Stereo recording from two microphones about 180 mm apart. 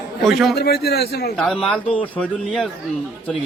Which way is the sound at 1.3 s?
5° left (ahead or behind).